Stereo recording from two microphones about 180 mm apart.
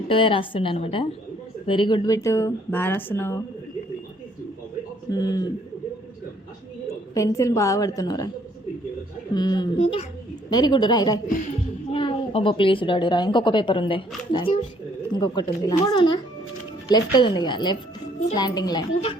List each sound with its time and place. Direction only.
0.1 s speech: 30° left (ahead or behind); by 3.4 s 15° left (ahead or behind)
5.1 s speech: 20° left (ahead or behind)
7.1 s speech: 15° left (ahead or behind)
9.3 s speech: 25° left (ahead or behind)
9.8 s a child's voice: 40° left (ahead or behind)
10.5 s a woman's voice: 25° left (ahead or behind)